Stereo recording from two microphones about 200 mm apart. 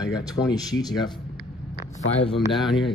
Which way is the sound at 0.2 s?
20° left (ahead or behind).